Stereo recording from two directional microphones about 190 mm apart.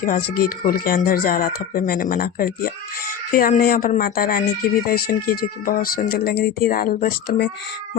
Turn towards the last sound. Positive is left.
turn(degrees=55)  # may be behind; listen again after turning